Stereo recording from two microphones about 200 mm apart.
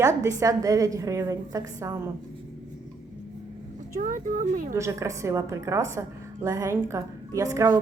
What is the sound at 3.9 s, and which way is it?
Speech, 40° right (ahead or behind).